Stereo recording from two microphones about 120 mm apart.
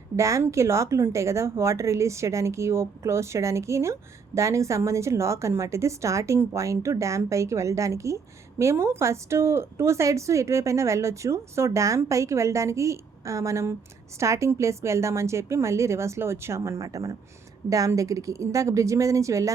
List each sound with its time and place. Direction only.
0.2 s a woman's voice: 25° right (ahead or behind)